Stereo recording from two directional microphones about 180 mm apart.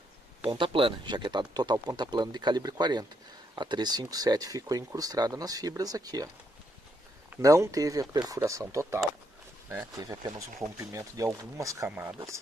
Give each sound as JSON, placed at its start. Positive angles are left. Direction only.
{"t": 0.5, "sound": "speech", "side_deg": -30}